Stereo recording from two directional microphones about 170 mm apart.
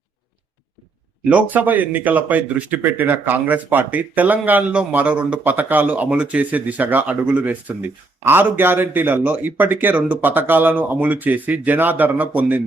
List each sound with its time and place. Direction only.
1.3 s speech: 10° right (ahead or behind)